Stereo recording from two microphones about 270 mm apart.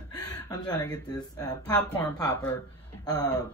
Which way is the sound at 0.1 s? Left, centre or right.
Centre.